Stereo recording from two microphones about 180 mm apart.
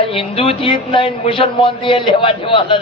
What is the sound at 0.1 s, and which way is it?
A man's voice, 30° left (ahead or behind).